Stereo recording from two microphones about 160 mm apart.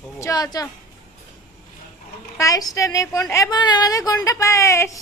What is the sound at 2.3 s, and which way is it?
A woman's voice, 20° left (ahead or behind).